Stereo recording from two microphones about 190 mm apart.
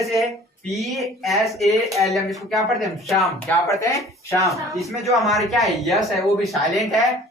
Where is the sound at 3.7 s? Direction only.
15° left (ahead or behind).